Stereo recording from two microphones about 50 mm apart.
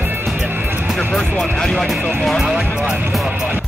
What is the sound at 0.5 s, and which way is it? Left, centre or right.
Music, right.